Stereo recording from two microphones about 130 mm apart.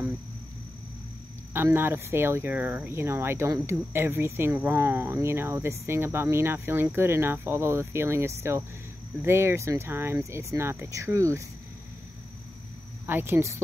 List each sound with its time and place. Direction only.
1.5 s speech: 15° right (ahead or behind)
13.0 s speech: 15° right (ahead or behind)